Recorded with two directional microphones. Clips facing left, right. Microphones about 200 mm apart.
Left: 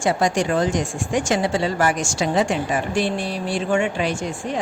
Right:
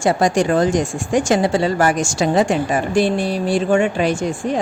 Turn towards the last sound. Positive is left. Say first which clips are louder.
# right 5 dB
turn(degrees=-40)  # may be behind; listen again after turning